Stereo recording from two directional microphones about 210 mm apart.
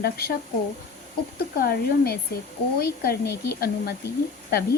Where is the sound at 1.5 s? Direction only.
45° left (ahead or behind).